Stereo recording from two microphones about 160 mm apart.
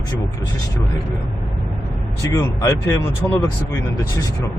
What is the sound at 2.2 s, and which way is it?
Speech, 20° left (ahead or behind).